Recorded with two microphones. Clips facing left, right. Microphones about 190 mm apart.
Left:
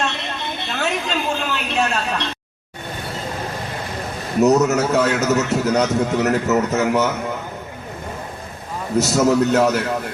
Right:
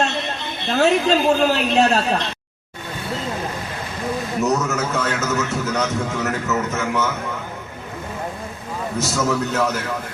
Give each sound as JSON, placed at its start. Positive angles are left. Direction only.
{"t": 0.7, "sound": "a woman's voice", "side_deg": -40}
{"t": 4.4, "sound": "a man's voice", "side_deg": 40}
{"t": 9.0, "sound": "a man's voice", "side_deg": 40}